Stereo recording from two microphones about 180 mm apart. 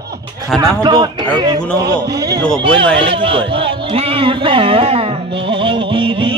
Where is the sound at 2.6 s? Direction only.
30° right (ahead or behind).